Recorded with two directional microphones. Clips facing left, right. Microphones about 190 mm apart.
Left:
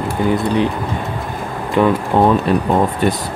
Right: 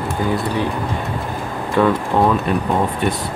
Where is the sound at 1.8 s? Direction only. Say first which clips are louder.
Left 2 dB; 15° left (ahead or behind).